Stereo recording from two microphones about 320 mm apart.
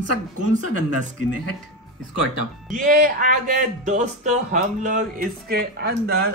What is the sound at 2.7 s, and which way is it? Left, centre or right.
A man's voice, right.